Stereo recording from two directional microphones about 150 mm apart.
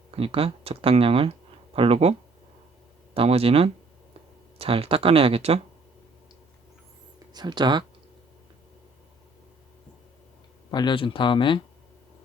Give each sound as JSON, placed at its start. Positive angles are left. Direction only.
{"t": 0.1, "sound": "speech", "side_deg": -40}
{"t": 3.2, "sound": "speech", "side_deg": -40}
{"t": 7.3, "sound": "speech", "side_deg": -30}
{"t": 10.7, "sound": "speech", "side_deg": 30}